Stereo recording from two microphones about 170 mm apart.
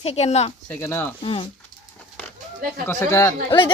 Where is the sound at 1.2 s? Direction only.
30° left (ahead or behind).